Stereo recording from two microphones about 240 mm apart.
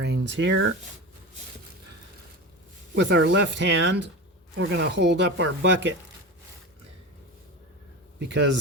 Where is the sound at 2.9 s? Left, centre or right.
Right.